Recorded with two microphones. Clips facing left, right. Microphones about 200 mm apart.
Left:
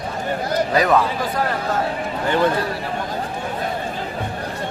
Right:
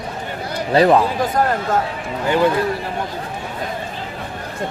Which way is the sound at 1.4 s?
45° right (ahead or behind).